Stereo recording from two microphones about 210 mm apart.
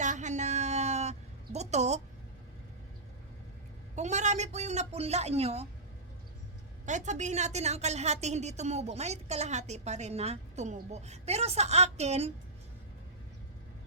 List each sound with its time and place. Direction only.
0.0 s a sound: 35° right (ahead or behind)
3.9 s a woman's voice: 35° right (ahead or behind)
6.8 s a woman's voice: 35° right (ahead or behind)